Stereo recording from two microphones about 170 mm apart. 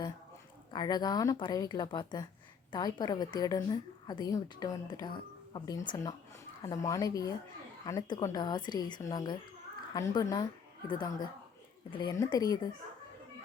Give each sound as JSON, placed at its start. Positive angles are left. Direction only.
{"t": 0.7, "sound": "a woman's voice", "side_deg": 25}